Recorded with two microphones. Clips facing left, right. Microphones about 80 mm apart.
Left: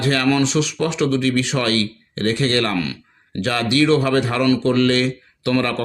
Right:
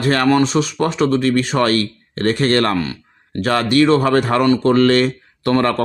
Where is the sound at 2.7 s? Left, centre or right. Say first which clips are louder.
Right 2 dB; right.